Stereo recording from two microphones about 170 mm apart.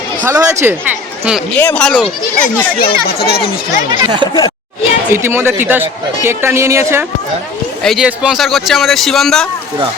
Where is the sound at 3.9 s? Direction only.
30° right (ahead or behind).